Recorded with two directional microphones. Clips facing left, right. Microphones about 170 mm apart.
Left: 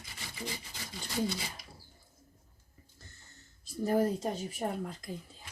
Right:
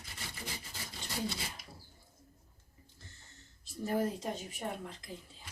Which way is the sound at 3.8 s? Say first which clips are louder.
Left 5 dB; 40° left (ahead or behind).